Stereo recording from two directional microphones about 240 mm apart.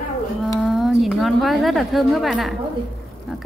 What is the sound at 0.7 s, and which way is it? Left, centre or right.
A woman's voice, centre.